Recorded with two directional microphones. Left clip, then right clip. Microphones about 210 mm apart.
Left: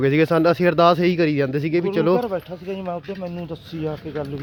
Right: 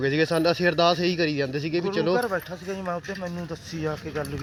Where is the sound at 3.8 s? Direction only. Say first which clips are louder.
Left 2 dB; 40° left (ahead or behind).